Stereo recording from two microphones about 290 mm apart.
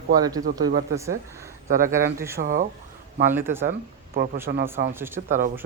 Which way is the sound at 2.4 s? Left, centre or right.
Right.